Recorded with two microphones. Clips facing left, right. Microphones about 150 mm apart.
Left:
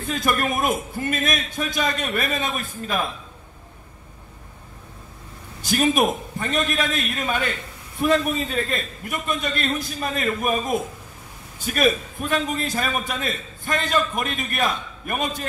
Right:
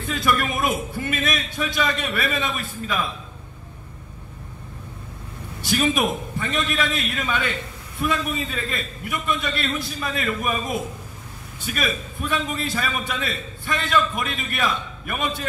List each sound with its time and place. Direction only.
0.1 s a man's voice: 45° left (ahead or behind)
5.6 s a man's voice: 45° left (ahead or behind)